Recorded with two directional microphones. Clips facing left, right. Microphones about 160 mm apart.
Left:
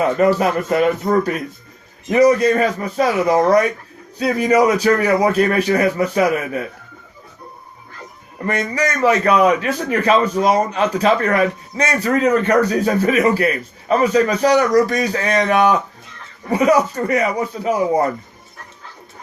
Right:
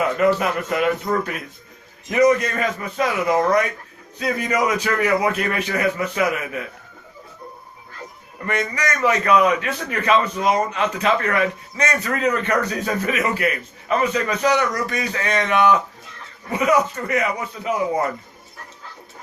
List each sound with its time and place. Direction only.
0.0 s a man's voice: 35° left (ahead or behind)
8.4 s a man's voice: 35° left (ahead or behind)